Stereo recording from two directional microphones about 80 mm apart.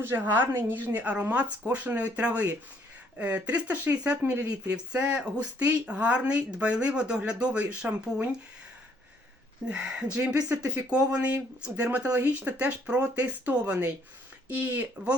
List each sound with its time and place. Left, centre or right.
0.0 s speech: right
9.6 s speech: centre